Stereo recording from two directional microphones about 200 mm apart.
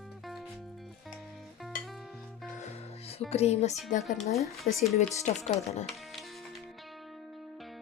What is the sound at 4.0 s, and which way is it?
Speech, centre (ahead or behind).